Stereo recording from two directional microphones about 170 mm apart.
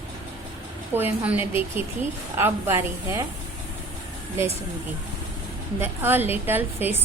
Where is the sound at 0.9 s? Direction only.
10° right (ahead or behind).